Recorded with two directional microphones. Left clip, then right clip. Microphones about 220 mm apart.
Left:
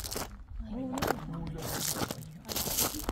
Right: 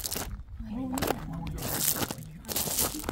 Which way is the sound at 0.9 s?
30° right (ahead or behind).